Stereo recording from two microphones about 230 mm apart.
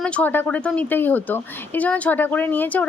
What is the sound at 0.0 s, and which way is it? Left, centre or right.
Speech, centre.